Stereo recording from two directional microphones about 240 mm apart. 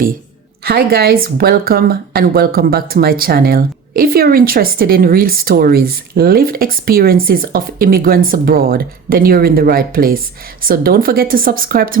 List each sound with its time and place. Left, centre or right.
0.6 s speech: right